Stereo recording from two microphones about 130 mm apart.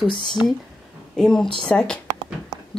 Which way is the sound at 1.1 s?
5° left (ahead or behind).